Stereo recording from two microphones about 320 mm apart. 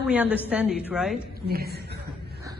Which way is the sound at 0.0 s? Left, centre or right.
Centre.